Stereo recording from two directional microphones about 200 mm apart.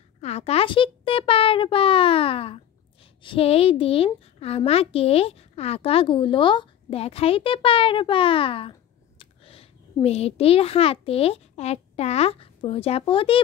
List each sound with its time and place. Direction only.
0.2 s a child's voice: 30° left (ahead or behind)